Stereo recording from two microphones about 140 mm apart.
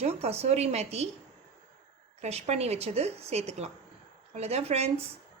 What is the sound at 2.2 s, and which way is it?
A woman's voice, 50° right (ahead or behind).